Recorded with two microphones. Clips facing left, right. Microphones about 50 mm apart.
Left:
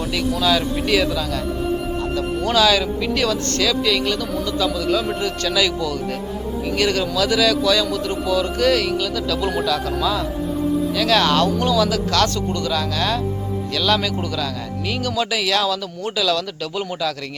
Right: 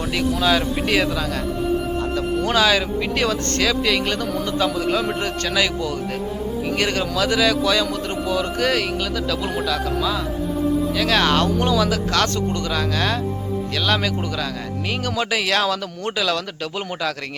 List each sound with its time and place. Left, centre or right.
0.4 s speech: right
9.6 s speech: centre
10.9 s a man's voice: right